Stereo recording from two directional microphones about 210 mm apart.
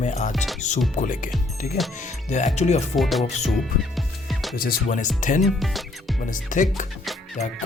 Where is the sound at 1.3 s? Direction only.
Centre (ahead or behind).